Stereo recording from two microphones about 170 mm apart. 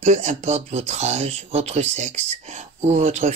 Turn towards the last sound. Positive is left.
turn(degrees=-40)  # may be behind; listen again after turning